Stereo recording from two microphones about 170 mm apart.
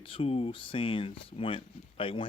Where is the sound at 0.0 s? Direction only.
30° left (ahead or behind).